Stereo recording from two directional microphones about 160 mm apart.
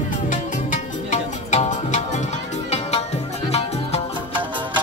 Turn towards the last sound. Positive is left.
turn(degrees=40)  # may be behind; listen again after turning